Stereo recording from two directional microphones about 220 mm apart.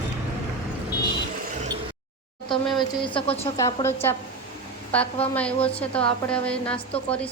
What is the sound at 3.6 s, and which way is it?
A woman's voice, 15° left (ahead or behind).